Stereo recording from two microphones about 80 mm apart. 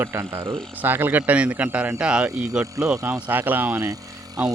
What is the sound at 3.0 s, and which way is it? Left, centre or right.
Speech, right.